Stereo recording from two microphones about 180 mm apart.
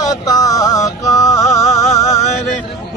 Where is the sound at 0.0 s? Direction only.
20° left (ahead or behind).